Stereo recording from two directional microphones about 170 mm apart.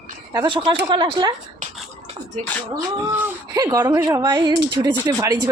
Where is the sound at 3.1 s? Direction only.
20° right (ahead or behind).